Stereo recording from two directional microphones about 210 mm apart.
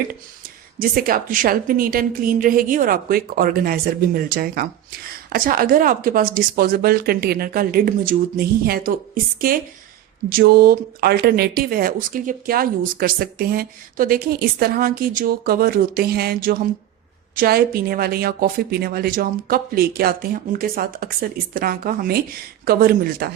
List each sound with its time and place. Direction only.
0.8 s a woman's voice: 45° right (ahead or behind)
10.2 s a woman's voice: 45° right (ahead or behind)